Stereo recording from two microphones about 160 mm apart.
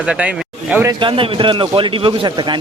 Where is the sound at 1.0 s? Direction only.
35° right (ahead or behind).